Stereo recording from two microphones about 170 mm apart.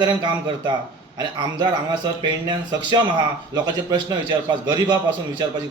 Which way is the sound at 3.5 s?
25° right (ahead or behind).